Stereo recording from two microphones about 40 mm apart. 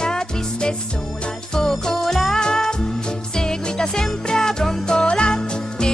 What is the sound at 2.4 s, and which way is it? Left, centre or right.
Music, centre.